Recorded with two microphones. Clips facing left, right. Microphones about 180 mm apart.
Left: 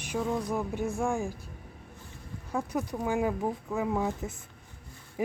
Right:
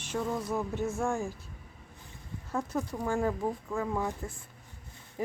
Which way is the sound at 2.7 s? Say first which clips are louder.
Left 2 dB; 15° left (ahead or behind).